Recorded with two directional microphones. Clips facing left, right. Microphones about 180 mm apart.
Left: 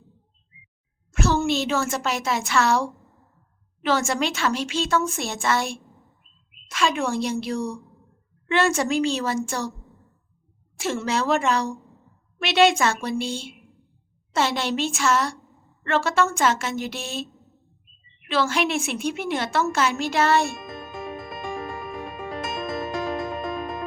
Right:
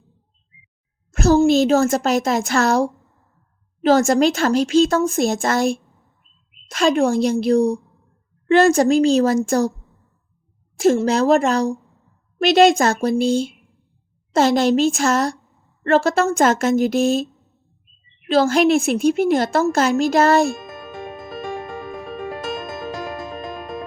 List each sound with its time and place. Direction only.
1.1 s a woman's voice: 40° right (ahead or behind)
10.8 s a woman's voice: 40° right (ahead or behind)
18.3 s a woman's voice: 40° right (ahead or behind)